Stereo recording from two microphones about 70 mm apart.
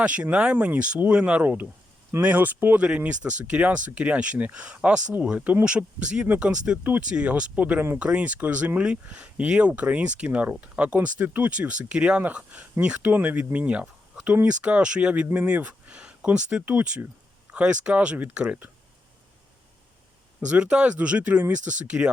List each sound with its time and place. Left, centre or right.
0.0 s speech: centre
20.5 s speech: centre